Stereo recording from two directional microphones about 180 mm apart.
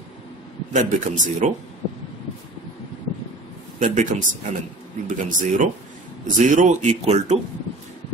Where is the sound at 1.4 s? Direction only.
40° right (ahead or behind).